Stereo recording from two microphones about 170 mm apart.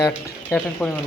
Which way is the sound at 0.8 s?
Centre (ahead or behind).